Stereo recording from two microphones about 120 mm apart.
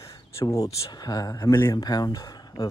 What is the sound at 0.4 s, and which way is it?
Speech, 25° left (ahead or behind).